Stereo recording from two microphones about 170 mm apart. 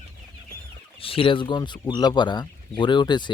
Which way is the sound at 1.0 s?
30° left (ahead or behind).